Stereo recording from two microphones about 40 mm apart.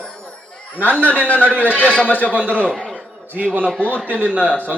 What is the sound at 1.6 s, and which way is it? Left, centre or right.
Speech, left.